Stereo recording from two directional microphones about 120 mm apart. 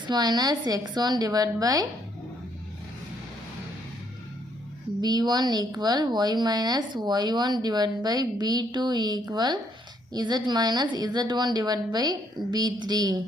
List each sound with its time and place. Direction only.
0.1 s a woman's voice: 35° right (ahead or behind)
4.9 s a woman's voice: 35° right (ahead or behind)